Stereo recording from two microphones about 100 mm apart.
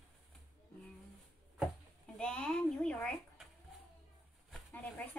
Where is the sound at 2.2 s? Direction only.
10° left (ahead or behind).